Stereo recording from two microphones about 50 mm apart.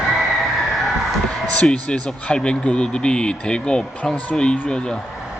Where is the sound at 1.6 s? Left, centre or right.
Centre.